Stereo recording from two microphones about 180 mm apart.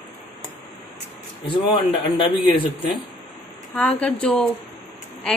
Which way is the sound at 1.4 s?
25° left (ahead or behind).